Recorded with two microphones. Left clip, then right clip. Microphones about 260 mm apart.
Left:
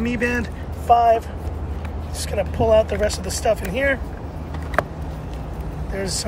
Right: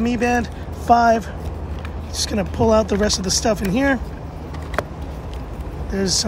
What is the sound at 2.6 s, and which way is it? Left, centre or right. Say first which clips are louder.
Speech: even; right.